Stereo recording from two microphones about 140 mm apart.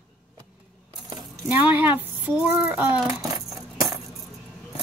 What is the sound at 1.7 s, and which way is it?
Speech, 10° right (ahead or behind).